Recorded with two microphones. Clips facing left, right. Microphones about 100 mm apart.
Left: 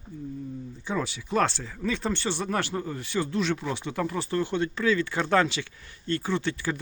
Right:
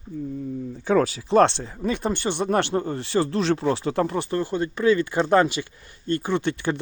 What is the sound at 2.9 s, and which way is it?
Speech, 35° right (ahead or behind).